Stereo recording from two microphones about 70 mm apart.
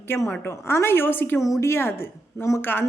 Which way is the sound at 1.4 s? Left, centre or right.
Left.